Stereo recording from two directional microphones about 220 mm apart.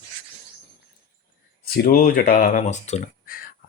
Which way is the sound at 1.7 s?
40° left (ahead or behind).